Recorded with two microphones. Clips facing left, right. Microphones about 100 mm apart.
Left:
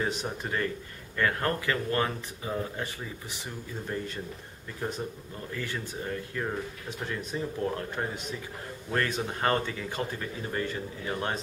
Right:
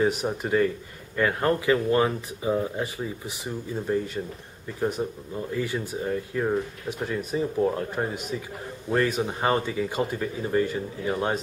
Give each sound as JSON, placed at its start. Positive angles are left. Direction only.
{"t": 0.0, "sound": "speech", "side_deg": -5}
{"t": 5.0, "sound": "speech", "side_deg": -20}